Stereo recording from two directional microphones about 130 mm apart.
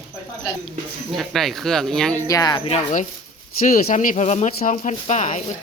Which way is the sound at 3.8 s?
80° left.